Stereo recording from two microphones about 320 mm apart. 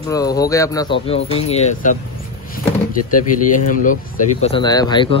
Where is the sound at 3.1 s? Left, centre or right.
Left.